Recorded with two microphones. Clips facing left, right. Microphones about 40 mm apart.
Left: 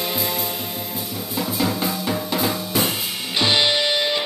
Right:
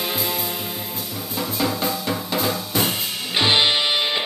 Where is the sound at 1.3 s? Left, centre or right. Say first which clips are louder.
Left 1 dB; centre.